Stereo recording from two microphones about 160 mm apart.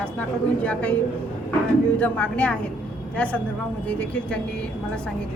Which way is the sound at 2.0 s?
10° left (ahead or behind).